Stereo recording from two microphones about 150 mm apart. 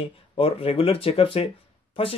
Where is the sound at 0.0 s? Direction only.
40° left (ahead or behind).